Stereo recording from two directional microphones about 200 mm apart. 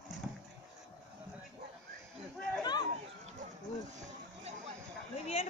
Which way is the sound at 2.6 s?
20° left (ahead or behind).